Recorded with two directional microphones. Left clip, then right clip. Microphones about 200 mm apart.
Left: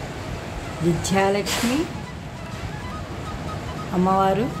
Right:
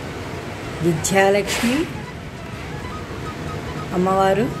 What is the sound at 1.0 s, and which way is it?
Speech, 10° left (ahead or behind).